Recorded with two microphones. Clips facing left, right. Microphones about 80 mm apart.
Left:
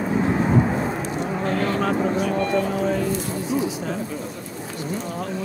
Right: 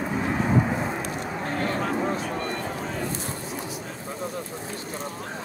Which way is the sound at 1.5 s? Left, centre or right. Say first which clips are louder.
Left 4 dB; left.